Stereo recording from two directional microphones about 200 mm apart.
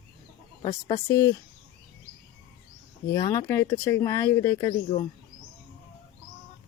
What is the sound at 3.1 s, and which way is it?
Speech, 15° left (ahead or behind).